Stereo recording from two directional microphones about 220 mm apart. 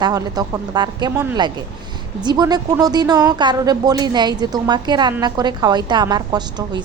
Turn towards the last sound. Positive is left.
turn(degrees=-20)  # may be behind; listen again after turning